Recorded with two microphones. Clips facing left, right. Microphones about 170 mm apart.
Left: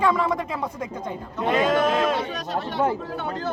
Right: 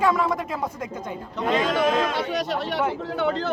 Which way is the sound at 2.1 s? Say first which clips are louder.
Right 2 dB; 75° right (ahead or behind).